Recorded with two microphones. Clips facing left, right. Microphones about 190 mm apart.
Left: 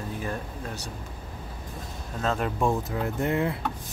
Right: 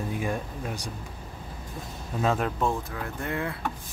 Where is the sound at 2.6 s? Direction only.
20° left (ahead or behind).